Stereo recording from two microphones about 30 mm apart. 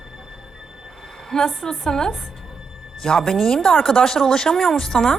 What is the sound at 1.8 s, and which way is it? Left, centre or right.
Speech, left.